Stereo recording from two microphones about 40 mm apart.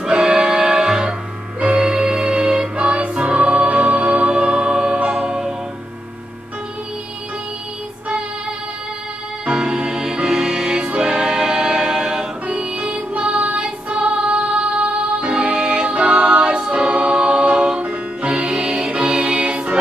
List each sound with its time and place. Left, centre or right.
0.1 s music: centre
9.5 s music: right
12.4 s music: right